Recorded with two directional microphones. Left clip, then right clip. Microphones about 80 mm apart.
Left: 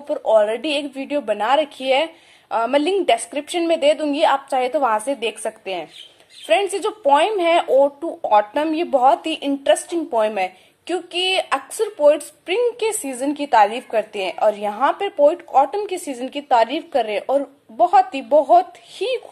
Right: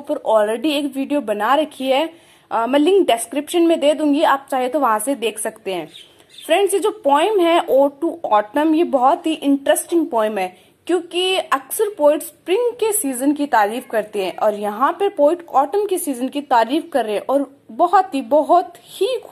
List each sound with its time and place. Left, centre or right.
0.1 s a woman's voice: centre
2.5 s speech: centre
3.1 s a woman's voice: centre
8.3 s a woman's voice: centre